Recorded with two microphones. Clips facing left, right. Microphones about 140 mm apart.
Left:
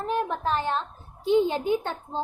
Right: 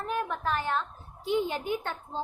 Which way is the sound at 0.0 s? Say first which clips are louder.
Left 4 dB; 25° left (ahead or behind).